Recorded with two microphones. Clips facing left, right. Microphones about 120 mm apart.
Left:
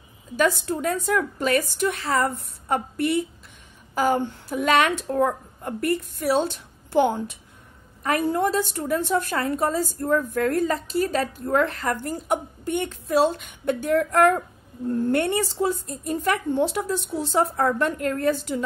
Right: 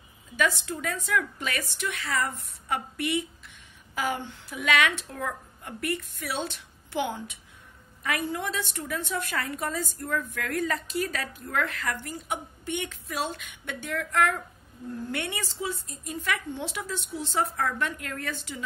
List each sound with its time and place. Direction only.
0.4 s a woman's voice: 45° left (ahead or behind)